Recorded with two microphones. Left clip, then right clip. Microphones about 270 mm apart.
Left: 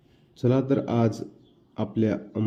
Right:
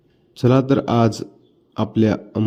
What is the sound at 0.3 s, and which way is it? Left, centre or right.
Speech, right.